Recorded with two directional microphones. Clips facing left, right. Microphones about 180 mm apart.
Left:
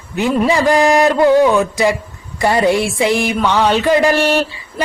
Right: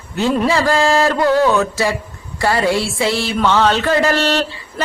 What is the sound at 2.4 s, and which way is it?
Speech, 20° left (ahead or behind).